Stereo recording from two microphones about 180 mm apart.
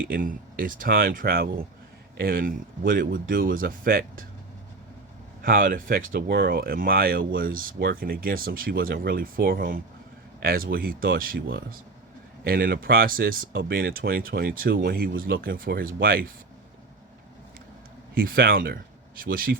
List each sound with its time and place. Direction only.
0.1 s speech: 50° right (ahead or behind)
5.4 s speech: 50° right (ahead or behind)
18.2 s speech: 55° right (ahead or behind)